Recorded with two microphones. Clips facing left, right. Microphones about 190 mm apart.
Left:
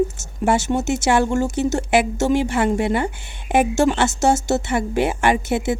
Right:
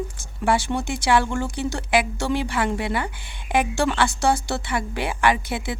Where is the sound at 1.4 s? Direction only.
45° left (ahead or behind).